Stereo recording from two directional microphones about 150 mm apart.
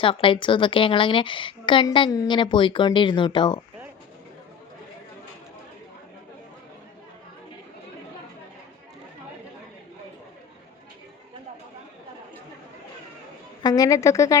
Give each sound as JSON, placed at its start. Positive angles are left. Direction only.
{"t": 0.0, "sound": "a woman's voice", "side_deg": 35}
{"t": 13.6, "sound": "a woman's voice", "side_deg": 25}